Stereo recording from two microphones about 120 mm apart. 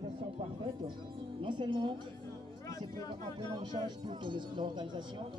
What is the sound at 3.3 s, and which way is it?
Speech, 40° right (ahead or behind).